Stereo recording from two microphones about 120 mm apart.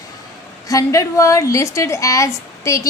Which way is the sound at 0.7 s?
25° left (ahead or behind).